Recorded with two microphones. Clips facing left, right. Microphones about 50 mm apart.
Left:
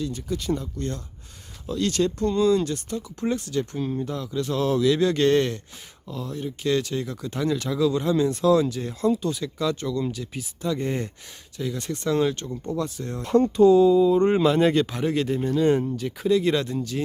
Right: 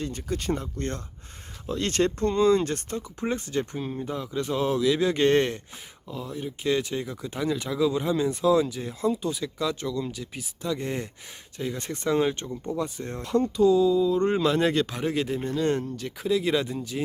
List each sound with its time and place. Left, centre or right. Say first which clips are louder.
0.0 s speech: left 2 dB; right
3.2 s speech: left 2 dB; right
3.8 s speech: left 3 dB; centre
5.3 s speech: left 1 dB; right
6.1 s speech: left 2 dB; centre
11.5 s speech: left 2 dB; right
13.2 s speech: left 5 dB; left
13.7 s mantra: left 4 dB; left; by 14.4 s centre
14.4 s speech: left 3 dB; centre